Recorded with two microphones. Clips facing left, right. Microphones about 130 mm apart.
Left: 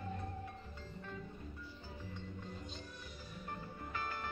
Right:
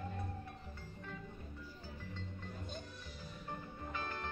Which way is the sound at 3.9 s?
20° right (ahead or behind).